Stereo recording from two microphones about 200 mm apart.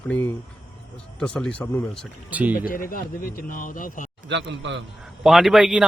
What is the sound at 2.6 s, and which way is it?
A man's voice, 45° left (ahead or behind).